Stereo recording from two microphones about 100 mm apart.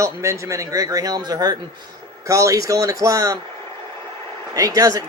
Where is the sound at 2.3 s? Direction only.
30° right (ahead or behind).